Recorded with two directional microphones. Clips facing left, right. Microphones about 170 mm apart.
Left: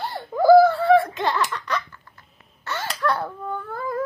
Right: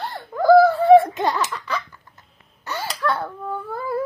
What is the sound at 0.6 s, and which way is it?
Speech, 15° right (ahead or behind).